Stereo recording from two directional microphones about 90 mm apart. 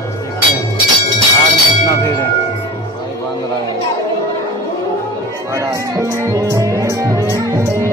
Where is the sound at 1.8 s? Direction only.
45° left (ahead or behind).